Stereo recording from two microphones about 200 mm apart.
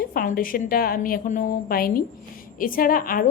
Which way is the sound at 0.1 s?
45° left (ahead or behind).